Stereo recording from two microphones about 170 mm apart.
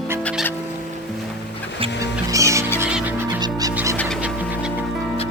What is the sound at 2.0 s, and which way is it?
Music, 20° right (ahead or behind).